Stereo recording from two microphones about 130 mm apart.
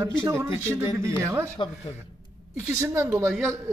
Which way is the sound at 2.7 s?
20° right (ahead or behind).